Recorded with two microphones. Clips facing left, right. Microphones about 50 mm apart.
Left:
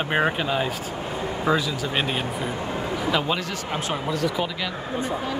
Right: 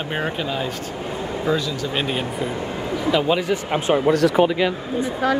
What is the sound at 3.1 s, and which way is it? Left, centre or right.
Speech, centre.